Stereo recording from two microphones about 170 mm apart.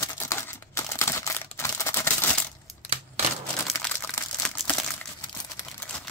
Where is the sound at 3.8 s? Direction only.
10° left (ahead or behind).